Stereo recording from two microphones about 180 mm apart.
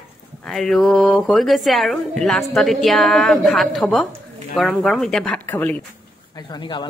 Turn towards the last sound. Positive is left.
turn(degrees=25)  # may be behind; listen again after turning